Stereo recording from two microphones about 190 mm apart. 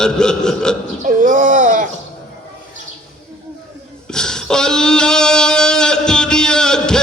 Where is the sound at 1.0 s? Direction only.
45° right (ahead or behind).